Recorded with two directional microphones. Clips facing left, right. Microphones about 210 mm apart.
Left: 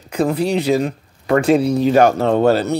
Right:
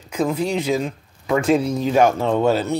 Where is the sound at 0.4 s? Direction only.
35° left (ahead or behind).